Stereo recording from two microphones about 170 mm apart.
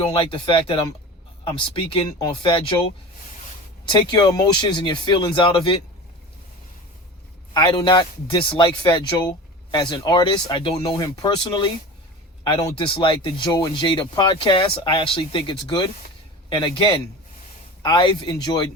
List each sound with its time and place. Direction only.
0.1 s speech: 30° left (ahead or behind)
4.1 s speech: 25° left (ahead or behind)
7.5 s speech: 25° left (ahead or behind)
12.7 s speech: 30° left (ahead or behind)